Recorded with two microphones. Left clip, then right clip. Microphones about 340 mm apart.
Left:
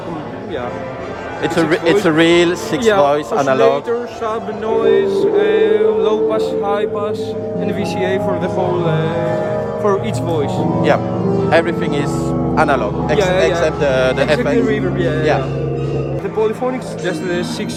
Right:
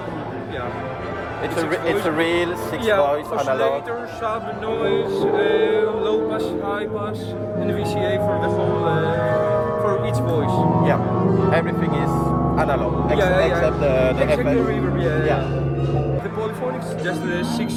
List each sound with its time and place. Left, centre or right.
1.5 s speech: left
4.9 s music: centre
11.5 s speech: left